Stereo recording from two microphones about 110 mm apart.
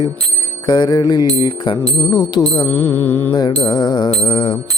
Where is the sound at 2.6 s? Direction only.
20° left (ahead or behind).